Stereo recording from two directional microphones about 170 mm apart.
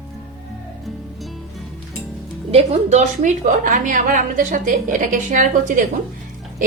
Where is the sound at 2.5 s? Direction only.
40° right (ahead or behind).